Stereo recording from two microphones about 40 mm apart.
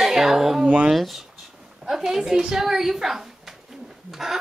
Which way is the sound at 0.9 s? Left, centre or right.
Centre.